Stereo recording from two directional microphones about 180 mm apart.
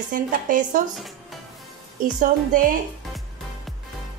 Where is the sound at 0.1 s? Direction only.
50° right (ahead or behind).